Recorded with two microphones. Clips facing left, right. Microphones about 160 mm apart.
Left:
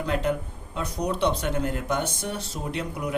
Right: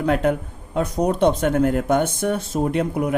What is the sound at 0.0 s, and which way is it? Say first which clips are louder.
Speech: right 6 dB; 55° right (ahead or behind).